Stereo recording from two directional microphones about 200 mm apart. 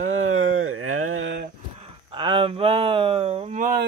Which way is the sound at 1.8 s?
25° right (ahead or behind).